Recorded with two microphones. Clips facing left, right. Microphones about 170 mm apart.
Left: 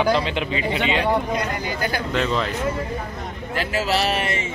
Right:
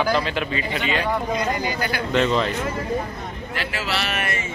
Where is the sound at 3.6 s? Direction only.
40° left (ahead or behind); by 4.5 s 25° left (ahead or behind).